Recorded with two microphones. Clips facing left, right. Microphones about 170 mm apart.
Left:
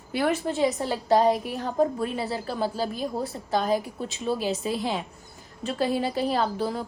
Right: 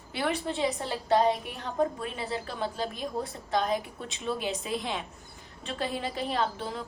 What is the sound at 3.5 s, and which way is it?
A woman's voice, 35° left (ahead or behind).